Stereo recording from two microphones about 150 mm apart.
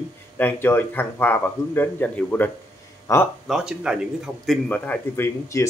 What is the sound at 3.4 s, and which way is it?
Speech, 5° right (ahead or behind).